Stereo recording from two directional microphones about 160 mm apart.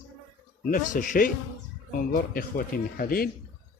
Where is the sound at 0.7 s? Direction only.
55° left (ahead or behind).